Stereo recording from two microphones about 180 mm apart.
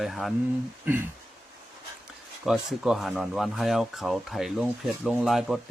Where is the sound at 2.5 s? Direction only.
Centre (ahead or behind).